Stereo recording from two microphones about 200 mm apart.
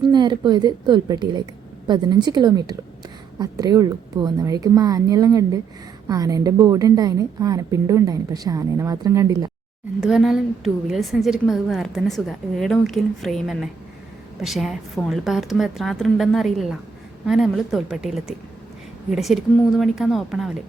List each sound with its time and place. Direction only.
0.0 s a woman's voice: 20° right (ahead or behind)
10.0 s a woman's voice: centre (ahead or behind)